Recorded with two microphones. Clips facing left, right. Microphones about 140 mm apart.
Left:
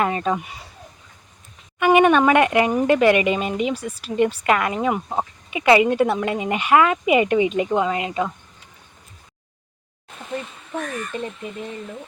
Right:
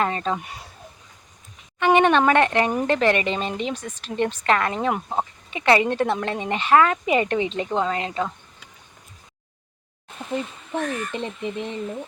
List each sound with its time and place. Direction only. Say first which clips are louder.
0.0 s a sound: left 2 dB; 10° left (ahead or behind)
1.8 s speech: left 2 dB; 10° left (ahead or behind)
5.5 s speech: left 4 dB; 10° left (ahead or behind)
11.1 s speech: right 1 dB; 20° right (ahead or behind)